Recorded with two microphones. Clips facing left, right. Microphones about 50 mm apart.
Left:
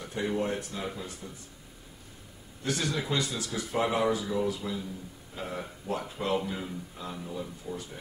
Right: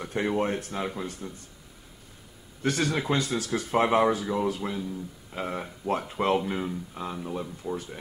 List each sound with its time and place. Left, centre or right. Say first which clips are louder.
0.0 s a sound: right 4 dB; right
0.4 s speech: right 4 dB; right
2.6 s speech: right 4 dB; right